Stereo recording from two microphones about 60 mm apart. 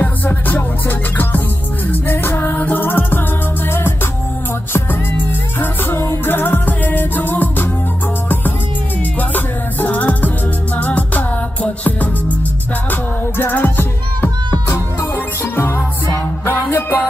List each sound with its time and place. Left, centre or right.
0.0 s music: left
5.6 s music: left
9.3 s music: left
16.4 s music: left